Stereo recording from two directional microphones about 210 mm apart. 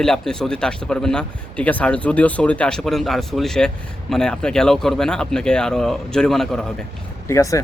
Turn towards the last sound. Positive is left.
turn(degrees=15)  # may be behind; listen again after turning